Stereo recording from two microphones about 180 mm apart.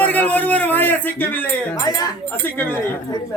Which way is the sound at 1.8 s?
20° left (ahead or behind).